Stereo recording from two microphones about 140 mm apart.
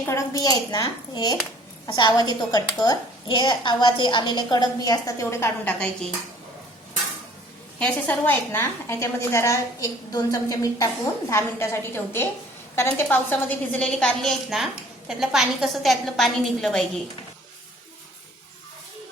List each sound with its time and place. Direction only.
0.0 s a woman's voice: 20° left (ahead or behind)
7.8 s a woman's voice: 10° left (ahead or behind)